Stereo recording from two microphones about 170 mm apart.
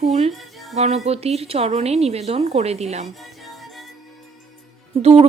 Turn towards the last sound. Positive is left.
turn(degrees=-40)  # may be behind; listen again after turning